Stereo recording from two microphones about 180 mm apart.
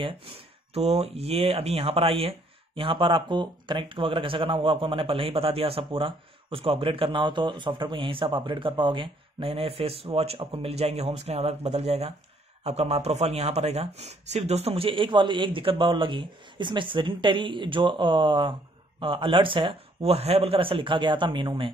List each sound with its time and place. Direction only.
0.7 s speech: 35° right (ahead or behind)